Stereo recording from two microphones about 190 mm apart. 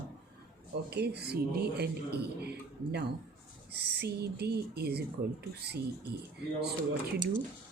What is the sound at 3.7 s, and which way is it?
Speech, 60° right (ahead or behind).